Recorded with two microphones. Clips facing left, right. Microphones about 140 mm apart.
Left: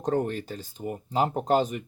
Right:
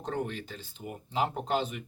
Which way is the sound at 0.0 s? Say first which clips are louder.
Left 7 dB; 45° left (ahead or behind).